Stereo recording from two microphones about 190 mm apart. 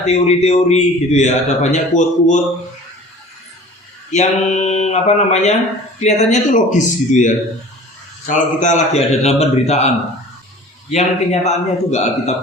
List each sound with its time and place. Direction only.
0.0 s a man's voice: 35° left (ahead or behind)
4.1 s a man's voice: 35° left (ahead or behind)
10.9 s a man's voice: 35° left (ahead or behind)